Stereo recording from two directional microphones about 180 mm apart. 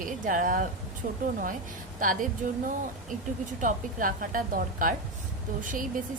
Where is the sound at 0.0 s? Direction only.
45° right (ahead or behind).